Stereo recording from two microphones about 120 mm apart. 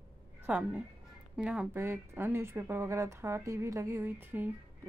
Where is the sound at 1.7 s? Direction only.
20° right (ahead or behind).